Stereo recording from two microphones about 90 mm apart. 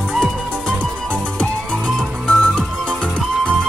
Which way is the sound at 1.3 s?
10° left (ahead or behind).